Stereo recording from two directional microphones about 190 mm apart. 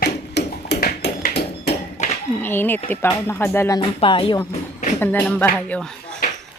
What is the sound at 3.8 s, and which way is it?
Speech, 25° left (ahead or behind).